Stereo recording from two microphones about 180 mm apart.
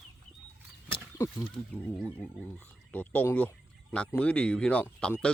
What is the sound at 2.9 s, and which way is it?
Speech, 10° left (ahead or behind).